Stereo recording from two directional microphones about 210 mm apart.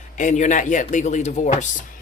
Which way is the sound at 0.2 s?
35° left (ahead or behind).